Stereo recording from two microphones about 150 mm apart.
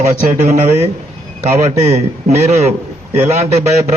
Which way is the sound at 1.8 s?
45° right (ahead or behind).